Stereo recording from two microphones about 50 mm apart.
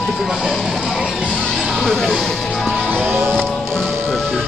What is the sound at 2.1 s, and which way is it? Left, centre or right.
Speech, centre.